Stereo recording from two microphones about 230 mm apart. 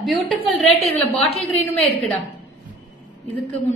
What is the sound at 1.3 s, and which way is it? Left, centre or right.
Speech, left.